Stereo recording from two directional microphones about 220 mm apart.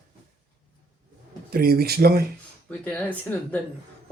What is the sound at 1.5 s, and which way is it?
Speech, 45° right (ahead or behind).